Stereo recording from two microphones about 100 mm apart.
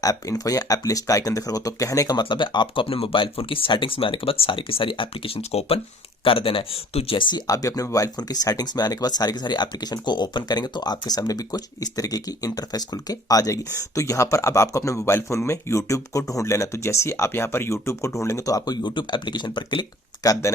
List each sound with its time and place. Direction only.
0.0 s speech: 35° left (ahead or behind)
2.3 s speech: 50° left (ahead or behind); by 5.8 s 80° left
6.2 s speech: 65° left (ahead or behind)
7.2 s speech: 50° left (ahead or behind)
7.4 s speech: 35° left (ahead or behind); by 19.8 s 50° left (ahead or behind)
20.2 s speech: 35° left (ahead or behind)